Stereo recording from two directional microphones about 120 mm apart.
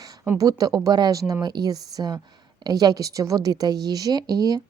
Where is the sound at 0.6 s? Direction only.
30° right (ahead or behind).